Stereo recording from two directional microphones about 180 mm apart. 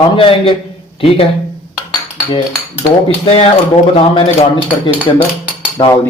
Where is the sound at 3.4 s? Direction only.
30° left (ahead or behind).